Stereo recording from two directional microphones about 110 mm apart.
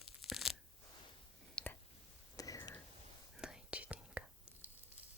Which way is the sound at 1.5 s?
15° left (ahead or behind).